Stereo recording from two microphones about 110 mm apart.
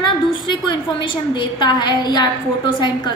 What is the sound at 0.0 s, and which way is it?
A woman's voice, 45° left (ahead or behind).